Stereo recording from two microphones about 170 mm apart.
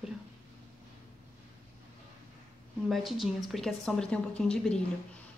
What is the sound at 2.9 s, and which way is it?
Speech, centre (ahead or behind).